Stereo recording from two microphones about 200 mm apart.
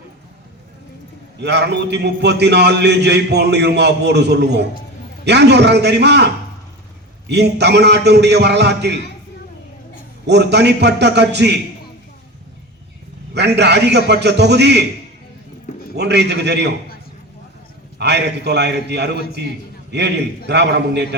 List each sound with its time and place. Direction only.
1.4 s a man's voice: 60° right (ahead or behind)
10.2 s a man's voice: 60° right (ahead or behind)
13.3 s a man's voice: 55° right (ahead or behind)
16.0 s a man's voice: 55° right (ahead or behind)
17.9 s a man's voice: 55° right (ahead or behind)